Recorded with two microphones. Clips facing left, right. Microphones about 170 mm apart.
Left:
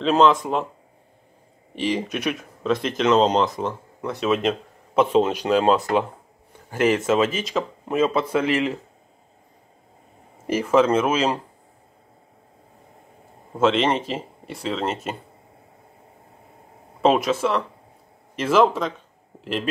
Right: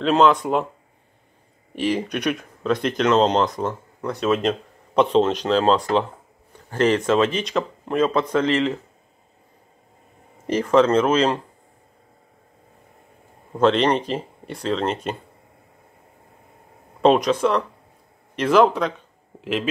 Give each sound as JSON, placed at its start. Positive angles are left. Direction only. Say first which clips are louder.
{"t": 0.0, "sound": "speech", "louder": "even", "side_deg": 0}
{"t": 1.8, "sound": "speech", "louder": "right 2 dB", "side_deg": 0}
{"t": 10.4, "sound": "speech", "louder": "right 1 dB", "side_deg": 5}
{"t": 13.6, "sound": "speech", "louder": "right 2 dB", "side_deg": 5}
{"t": 17.0, "sound": "speech", "louder": "right 2 dB", "side_deg": 5}